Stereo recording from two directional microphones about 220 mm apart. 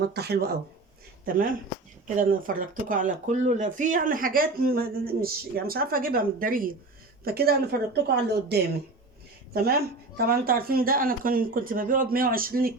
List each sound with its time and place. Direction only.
0.1 s a woman's voice: 45° right (ahead or behind)